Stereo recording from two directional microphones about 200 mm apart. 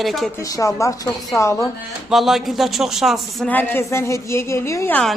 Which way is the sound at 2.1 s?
Centre (ahead or behind).